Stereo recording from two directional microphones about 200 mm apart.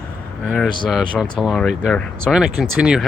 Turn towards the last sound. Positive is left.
turn(degrees=-5)  # may be behind; listen again after turning